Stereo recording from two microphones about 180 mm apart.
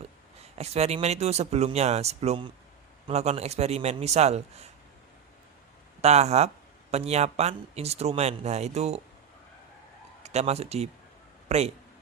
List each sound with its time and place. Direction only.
0.6 s speech: 35° right (ahead or behind)
6.0 s speech: 35° right (ahead or behind)
10.2 s speech: 35° right (ahead or behind)